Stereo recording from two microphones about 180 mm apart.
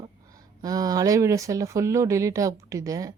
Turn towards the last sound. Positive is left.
turn(degrees=-20)  # may be behind; listen again after turning